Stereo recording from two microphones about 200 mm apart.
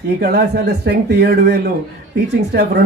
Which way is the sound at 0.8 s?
55° right (ahead or behind).